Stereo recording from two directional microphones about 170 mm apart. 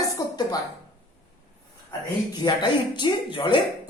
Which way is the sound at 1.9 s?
25° left (ahead or behind).